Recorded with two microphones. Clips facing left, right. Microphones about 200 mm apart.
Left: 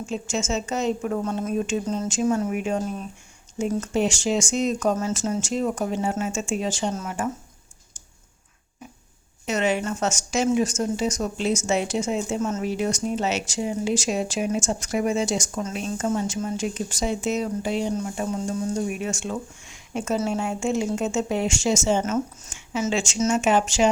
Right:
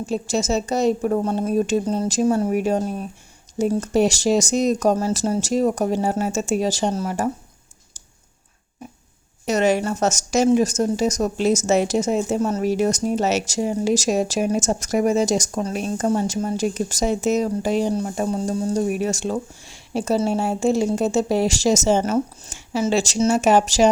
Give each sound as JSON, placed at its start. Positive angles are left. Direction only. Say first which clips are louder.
{"t": 0.0, "sound": "speech", "louder": "right 5 dB", "side_deg": -35}
{"t": 9.5, "sound": "speech", "louder": "right 5 dB", "side_deg": -40}